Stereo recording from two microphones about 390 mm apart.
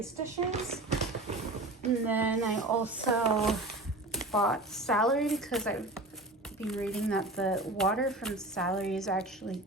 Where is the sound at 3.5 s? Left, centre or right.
Centre.